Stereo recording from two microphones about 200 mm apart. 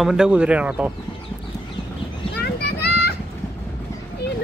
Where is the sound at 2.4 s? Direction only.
50° left (ahead or behind).